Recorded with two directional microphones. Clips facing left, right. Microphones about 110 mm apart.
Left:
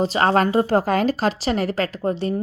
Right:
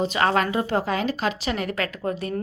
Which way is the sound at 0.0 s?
35° left (ahead or behind).